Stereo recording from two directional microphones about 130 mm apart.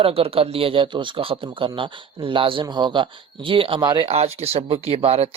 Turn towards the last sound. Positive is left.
turn(degrees=-50)  # may be behind; listen again after turning